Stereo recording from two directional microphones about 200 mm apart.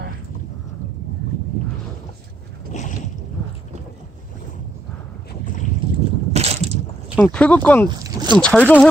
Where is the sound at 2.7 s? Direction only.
40° left (ahead or behind).